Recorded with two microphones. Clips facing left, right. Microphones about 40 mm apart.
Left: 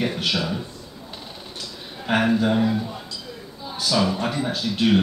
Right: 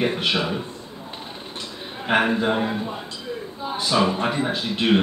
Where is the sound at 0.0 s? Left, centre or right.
Right.